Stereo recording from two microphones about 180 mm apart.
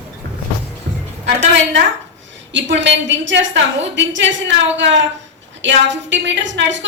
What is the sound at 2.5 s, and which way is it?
A woman's voice, 90° right.